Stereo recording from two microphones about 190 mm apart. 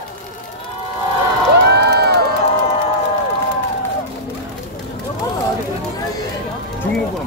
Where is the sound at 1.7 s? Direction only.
60° right (ahead or behind).